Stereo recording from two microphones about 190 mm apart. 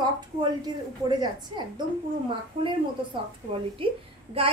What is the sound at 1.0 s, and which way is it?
A woman's voice, 20° right (ahead or behind).